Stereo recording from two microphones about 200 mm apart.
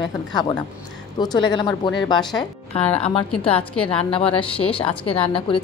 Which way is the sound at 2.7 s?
30° left (ahead or behind).